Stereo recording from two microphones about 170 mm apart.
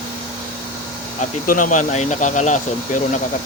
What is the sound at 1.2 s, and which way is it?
Speech, 50° left (ahead or behind).